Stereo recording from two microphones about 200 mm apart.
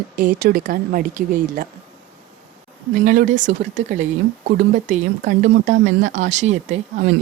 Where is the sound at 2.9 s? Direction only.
40° right (ahead or behind).